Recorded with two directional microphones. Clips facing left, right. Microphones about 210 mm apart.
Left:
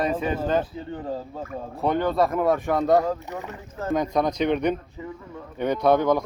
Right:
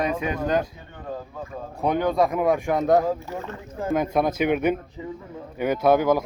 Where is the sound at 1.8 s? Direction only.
10° right (ahead or behind).